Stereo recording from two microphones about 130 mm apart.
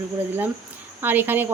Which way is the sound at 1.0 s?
15° right (ahead or behind).